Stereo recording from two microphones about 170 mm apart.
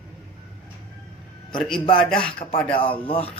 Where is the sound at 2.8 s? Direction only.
30° left (ahead or behind).